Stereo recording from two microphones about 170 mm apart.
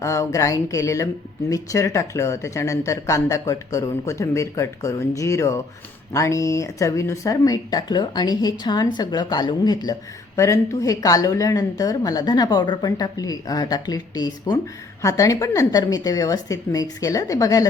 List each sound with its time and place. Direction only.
0.0 s a woman's voice: 20° left (ahead or behind)